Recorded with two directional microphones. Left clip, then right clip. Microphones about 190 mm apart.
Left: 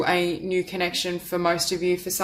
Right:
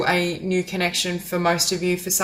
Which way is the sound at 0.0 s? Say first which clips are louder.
Right 1 dB; 35° left (ahead or behind).